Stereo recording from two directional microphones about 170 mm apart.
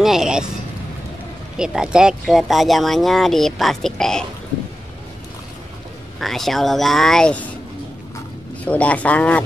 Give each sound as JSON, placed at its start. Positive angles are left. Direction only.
{"t": 0.0, "sound": "vehicle", "side_deg": 0}
{"t": 1.6, "sound": "speech", "side_deg": -5}
{"t": 6.1, "sound": "speech", "side_deg": 0}
{"t": 8.6, "sound": "speech", "side_deg": 10}